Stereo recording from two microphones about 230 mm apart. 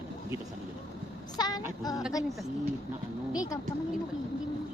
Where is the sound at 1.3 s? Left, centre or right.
Centre.